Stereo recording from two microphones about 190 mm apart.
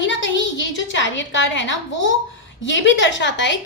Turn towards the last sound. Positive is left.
turn(degrees=70)  # may be behind; listen again after turning